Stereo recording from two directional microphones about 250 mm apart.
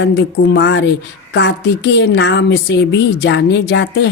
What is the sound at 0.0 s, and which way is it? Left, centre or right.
Speech, left.